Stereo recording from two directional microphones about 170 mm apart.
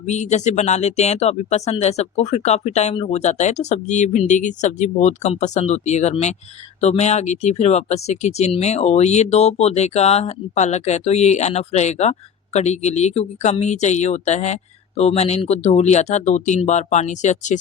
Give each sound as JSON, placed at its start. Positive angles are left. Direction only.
{"t": 0.0, "sound": "speech", "side_deg": 45}